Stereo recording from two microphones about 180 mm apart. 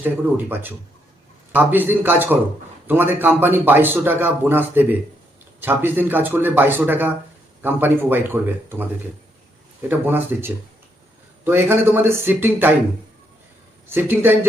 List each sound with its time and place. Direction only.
0.0 s a man's voice: 10° right (ahead or behind)
9.9 s a man's voice: 10° right (ahead or behind)
13.9 s a man's voice: 10° right (ahead or behind)